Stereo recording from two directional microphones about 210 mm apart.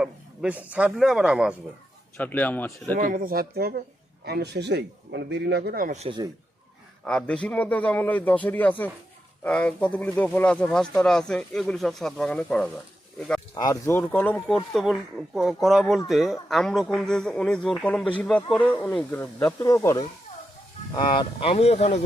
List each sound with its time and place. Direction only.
0.0 s speech: 5° right (ahead or behind)
2.1 s a man's voice: 10° left (ahead or behind)
3.0 s a man's voice: 40° right (ahead or behind)
7.0 s a man's voice: 5° left (ahead or behind)
13.5 s a man's voice: 20° left (ahead or behind)